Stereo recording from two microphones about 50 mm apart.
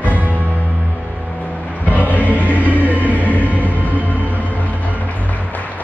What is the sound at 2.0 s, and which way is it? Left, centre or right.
Music, left.